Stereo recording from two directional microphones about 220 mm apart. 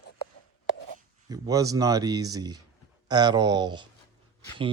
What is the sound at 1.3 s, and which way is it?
Speech, 15° right (ahead or behind).